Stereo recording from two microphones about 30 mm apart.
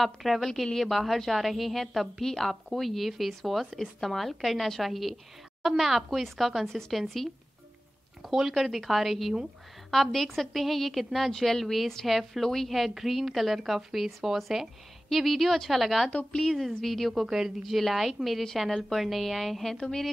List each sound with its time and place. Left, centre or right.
0.0 s speech: centre
8.4 s a woman's voice: centre
12.7 s speech: centre
15.0 s speech: centre
17.3 s speech: centre
17.6 s speech: centre